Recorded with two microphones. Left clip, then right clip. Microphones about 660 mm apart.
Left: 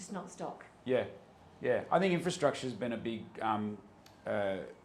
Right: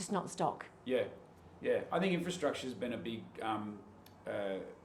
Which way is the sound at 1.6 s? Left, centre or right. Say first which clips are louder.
Left 4 dB; left.